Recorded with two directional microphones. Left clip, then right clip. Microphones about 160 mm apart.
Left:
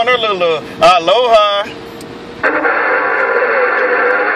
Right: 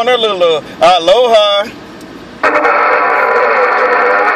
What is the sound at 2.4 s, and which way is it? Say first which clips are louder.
Music: right 4 dB; 50° right (ahead or behind).